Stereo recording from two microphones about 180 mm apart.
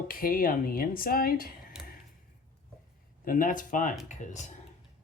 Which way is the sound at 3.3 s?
50° left (ahead or behind).